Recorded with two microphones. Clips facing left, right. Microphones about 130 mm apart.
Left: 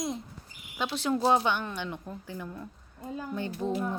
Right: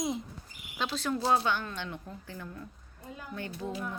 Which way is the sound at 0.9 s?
25° left (ahead or behind).